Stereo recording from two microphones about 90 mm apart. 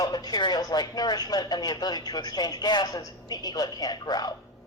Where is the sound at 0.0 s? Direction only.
50° left (ahead or behind).